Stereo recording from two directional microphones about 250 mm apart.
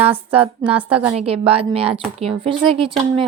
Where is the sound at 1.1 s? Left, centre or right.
Right.